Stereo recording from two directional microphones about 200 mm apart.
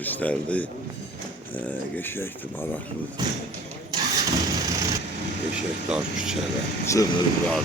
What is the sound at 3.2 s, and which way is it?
Speech, 20° right (ahead or behind).